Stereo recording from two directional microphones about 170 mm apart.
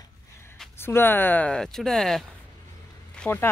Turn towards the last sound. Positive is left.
turn(degrees=10)  # may be behind; listen again after turning